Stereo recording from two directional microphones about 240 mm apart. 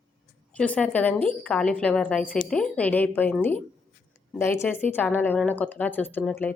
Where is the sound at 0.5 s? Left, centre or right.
Centre.